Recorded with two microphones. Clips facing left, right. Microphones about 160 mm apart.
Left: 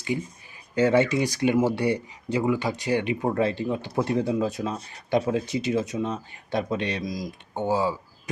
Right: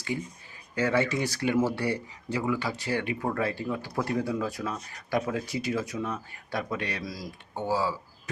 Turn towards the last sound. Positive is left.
turn(degrees=20)  # may be behind; listen again after turning